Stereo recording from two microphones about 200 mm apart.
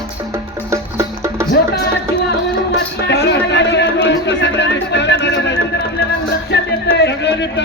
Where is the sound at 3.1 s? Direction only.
60° left (ahead or behind).